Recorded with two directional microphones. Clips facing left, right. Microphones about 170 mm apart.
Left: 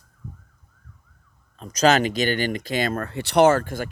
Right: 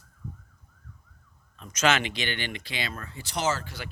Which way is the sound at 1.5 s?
35° left (ahead or behind).